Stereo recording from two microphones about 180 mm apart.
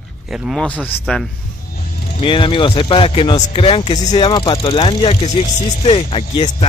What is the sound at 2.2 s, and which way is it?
Speech, 30° left (ahead or behind).